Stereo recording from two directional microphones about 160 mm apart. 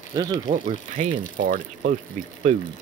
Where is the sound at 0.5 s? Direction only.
40° right (ahead or behind).